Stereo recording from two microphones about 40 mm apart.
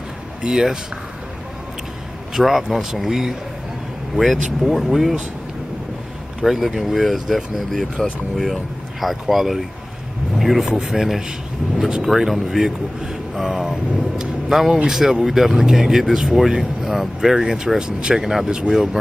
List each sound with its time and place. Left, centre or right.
0.4 s speech: right
2.3 s speech: centre
6.4 s speech: centre
9.0 s speech: centre